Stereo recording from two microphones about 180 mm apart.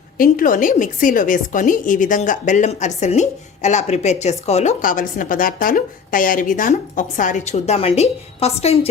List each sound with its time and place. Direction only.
0.2 s a woman's voice: 50° left (ahead or behind)